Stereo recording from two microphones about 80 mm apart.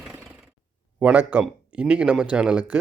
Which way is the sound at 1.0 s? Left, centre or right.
Right.